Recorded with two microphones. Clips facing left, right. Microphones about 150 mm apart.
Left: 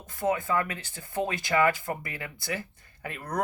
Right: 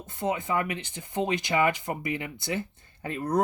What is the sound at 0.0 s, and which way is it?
Speech, 25° right (ahead or behind).